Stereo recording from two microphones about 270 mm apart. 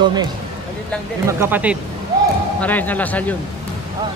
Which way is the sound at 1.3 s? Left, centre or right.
Centre.